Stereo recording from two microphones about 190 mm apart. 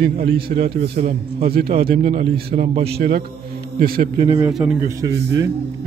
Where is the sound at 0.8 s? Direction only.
35° right (ahead or behind).